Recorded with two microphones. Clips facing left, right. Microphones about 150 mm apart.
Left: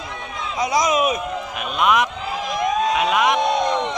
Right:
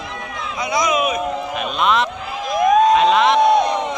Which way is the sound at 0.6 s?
40° left (ahead or behind).